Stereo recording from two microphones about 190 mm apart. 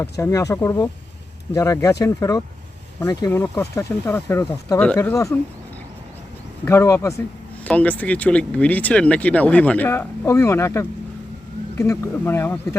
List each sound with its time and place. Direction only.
0.0 s speech: 15° left (ahead or behind)
6.7 s speech: 15° left (ahead or behind)